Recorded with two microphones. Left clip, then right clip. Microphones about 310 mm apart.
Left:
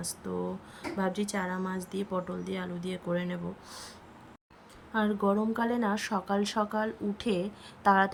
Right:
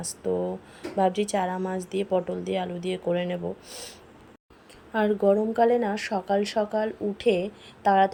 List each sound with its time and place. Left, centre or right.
0.9 s speech: centre
4.9 s speech: centre